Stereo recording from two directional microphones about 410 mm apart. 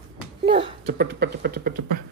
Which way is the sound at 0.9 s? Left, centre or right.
Right.